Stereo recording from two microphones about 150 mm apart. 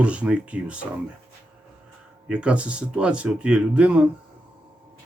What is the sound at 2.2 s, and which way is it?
Speech, 5° right (ahead or behind).